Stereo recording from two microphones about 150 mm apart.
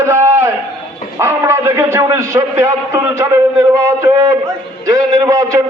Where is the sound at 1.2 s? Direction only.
15° right (ahead or behind).